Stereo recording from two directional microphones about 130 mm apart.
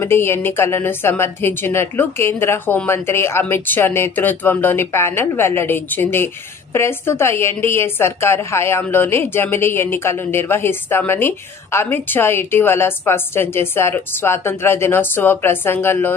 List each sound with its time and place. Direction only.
0.0 s a woman's voice: 20° left (ahead or behind)